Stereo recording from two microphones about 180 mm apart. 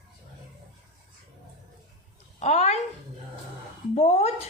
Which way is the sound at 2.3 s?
40° left (ahead or behind).